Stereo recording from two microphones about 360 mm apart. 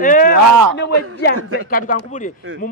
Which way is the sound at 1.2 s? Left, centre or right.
Left.